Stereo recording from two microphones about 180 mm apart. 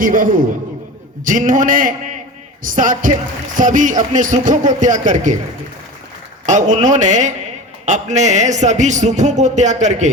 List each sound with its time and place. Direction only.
0.0 s speech: 50° right (ahead or behind)
6.4 s a man's voice: 45° right (ahead or behind)